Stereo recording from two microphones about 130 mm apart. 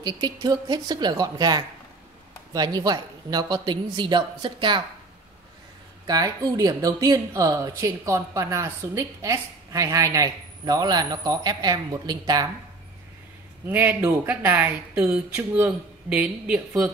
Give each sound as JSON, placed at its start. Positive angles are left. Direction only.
{"t": 0.0, "sound": "a woman's voice", "side_deg": -35}
{"t": 6.0, "sound": "speech", "side_deg": -30}
{"t": 13.7, "sound": "speech", "side_deg": -15}